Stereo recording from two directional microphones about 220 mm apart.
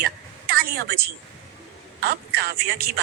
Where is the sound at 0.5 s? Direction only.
45° right (ahead or behind).